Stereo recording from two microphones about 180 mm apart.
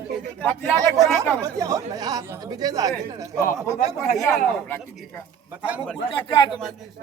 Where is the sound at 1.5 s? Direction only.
20° right (ahead or behind).